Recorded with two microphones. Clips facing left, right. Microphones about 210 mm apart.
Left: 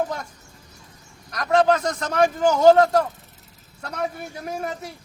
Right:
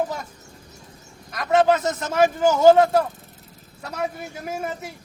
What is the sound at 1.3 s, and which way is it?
A man's voice, 5° right (ahead or behind).